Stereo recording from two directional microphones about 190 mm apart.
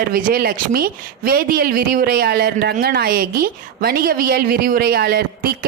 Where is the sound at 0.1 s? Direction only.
45° right (ahead or behind).